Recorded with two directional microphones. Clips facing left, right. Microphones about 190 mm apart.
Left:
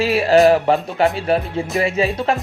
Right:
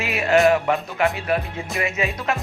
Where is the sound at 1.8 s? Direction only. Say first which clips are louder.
Left 5 dB; 30° left (ahead or behind).